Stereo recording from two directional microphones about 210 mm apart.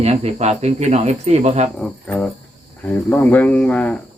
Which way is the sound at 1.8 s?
5° left (ahead or behind).